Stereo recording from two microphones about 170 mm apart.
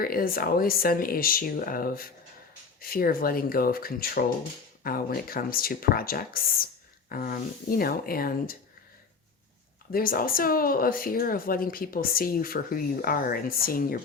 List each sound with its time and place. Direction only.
0.0 s speech: 60° left (ahead or behind)
9.9 s speech: 55° left (ahead or behind)